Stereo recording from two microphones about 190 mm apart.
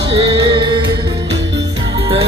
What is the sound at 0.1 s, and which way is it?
Music, 30° right (ahead or behind).